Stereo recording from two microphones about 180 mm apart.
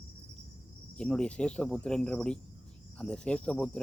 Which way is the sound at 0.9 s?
5° left (ahead or behind).